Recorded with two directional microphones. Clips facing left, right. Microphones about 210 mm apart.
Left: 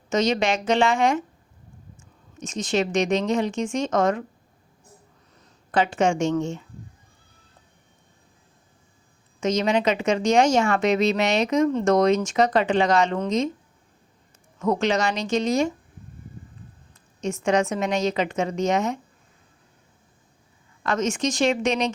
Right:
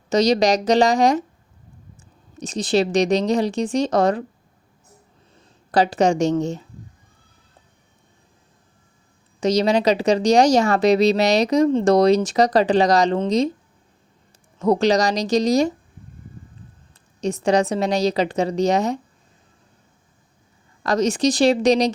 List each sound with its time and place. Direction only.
0.1 s speech: 35° right (ahead or behind)
2.4 s speech: 35° right (ahead or behind)
5.3 s speech: 35° right (ahead or behind)
9.4 s speech: 35° right (ahead or behind)
14.6 s speech: 35° right (ahead or behind)
17.2 s speech: 35° right (ahead or behind)
20.8 s speech: 35° right (ahead or behind)